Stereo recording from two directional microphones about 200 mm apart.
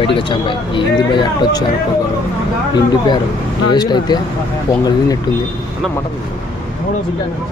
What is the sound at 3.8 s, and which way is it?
Speech, 20° left (ahead or behind).